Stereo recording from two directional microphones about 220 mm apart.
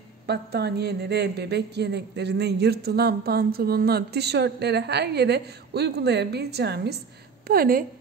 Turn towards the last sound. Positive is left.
turn(degrees=-40)  # may be behind; listen again after turning